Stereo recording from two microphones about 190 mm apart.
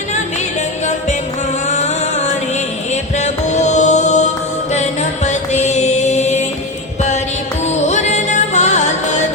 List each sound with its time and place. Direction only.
1.6 s a sound: 35° left (ahead or behind)
2.9 s music: 35° left (ahead or behind)
7.6 s music: 35° left (ahead or behind)